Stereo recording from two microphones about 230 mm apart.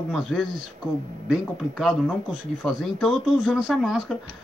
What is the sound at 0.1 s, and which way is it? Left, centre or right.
Speech, centre.